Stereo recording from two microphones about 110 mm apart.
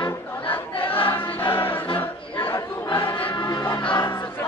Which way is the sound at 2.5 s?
40° left (ahead or behind).